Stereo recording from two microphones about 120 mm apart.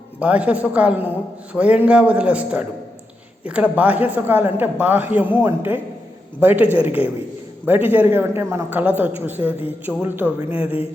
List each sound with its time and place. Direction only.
0.2 s a woman's voice: 10° right (ahead or behind)